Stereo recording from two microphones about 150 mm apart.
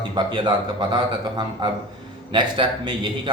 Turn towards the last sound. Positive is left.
turn(degrees=-35)  # may be behind; listen again after turning